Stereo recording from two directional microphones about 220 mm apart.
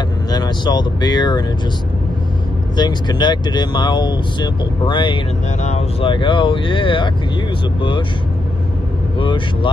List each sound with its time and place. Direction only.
0.3 s speech: 20° left (ahead or behind)
2.7 s speech: 20° left (ahead or behind)
9.2 s speech: 20° left (ahead or behind)